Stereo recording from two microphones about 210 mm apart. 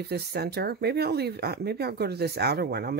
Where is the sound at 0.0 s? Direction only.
50° right (ahead or behind).